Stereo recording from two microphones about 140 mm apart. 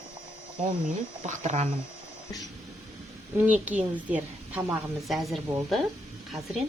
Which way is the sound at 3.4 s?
10° right (ahead or behind).